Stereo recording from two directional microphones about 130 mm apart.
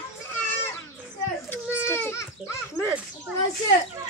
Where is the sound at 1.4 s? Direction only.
15° left (ahead or behind).